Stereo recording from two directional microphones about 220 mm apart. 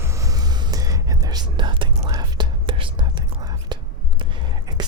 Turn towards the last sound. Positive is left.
turn(degrees=-20)  # may be behind; listen again after turning